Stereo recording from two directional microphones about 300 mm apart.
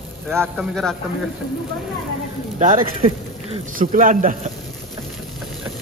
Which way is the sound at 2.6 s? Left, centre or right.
Right.